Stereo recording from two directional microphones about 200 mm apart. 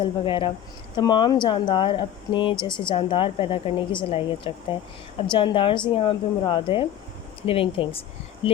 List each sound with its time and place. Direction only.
0.0 s speech: 25° left (ahead or behind)